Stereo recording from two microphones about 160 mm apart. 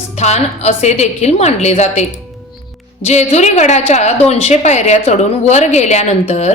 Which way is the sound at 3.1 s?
45° left (ahead or behind).